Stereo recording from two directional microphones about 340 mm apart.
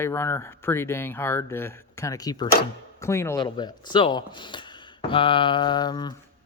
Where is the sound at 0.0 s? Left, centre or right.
Centre.